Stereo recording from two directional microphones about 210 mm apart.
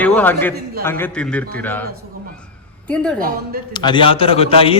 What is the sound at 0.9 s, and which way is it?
A man's voice, 10° left (ahead or behind).